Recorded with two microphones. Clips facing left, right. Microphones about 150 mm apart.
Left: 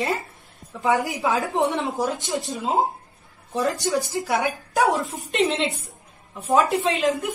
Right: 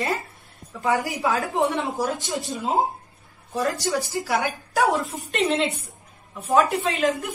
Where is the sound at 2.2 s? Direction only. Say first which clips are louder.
Left 2 dB; centre (ahead or behind).